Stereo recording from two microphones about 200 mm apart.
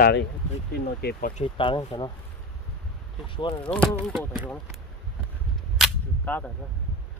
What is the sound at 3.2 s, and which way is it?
Speech, 25° left (ahead or behind).